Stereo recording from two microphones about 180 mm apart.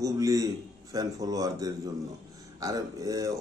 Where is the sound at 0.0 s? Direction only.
20° right (ahead or behind).